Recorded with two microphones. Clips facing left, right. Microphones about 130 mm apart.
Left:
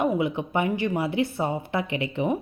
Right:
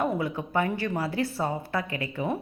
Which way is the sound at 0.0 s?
20° left (ahead or behind).